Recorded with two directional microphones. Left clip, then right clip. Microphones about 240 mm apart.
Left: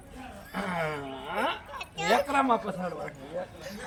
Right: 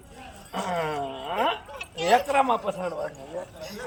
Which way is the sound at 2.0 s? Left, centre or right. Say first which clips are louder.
Right 4 dB; centre.